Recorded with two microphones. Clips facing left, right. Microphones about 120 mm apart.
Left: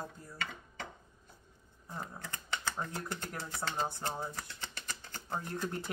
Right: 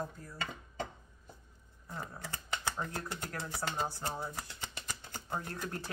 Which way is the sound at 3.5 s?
10° right (ahead or behind).